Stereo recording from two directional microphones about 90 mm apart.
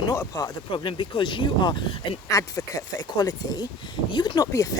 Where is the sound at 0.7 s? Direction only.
65° left (ahead or behind).